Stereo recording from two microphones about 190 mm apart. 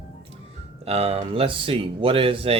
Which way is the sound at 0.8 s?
35° right (ahead or behind).